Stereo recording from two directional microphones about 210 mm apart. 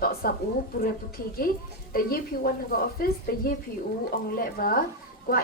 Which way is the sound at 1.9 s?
45° left (ahead or behind).